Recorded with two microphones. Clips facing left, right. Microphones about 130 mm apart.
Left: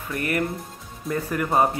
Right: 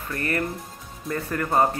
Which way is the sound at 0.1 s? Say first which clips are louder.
Left 2 dB; 10° left (ahead or behind).